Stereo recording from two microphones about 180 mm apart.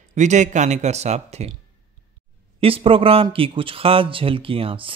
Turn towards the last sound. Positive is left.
turn(degrees=-30)  # may be behind; listen again after turning